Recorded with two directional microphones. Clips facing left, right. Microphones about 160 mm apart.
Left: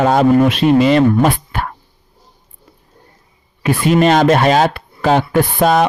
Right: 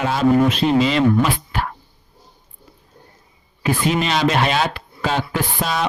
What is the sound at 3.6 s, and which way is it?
Speech, 60° left (ahead or behind).